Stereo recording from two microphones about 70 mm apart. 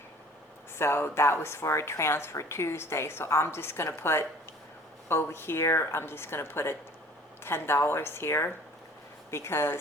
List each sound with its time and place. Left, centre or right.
0.8 s a woman's voice: left